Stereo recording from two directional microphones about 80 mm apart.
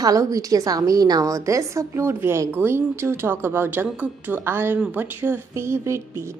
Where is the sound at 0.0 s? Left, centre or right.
Right.